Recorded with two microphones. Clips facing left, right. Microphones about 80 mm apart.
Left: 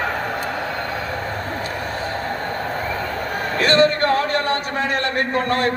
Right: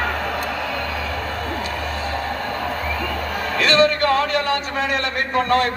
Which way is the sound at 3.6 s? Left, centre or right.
Left.